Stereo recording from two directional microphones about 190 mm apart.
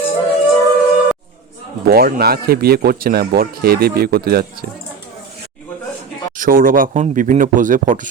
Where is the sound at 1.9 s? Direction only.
50° right (ahead or behind).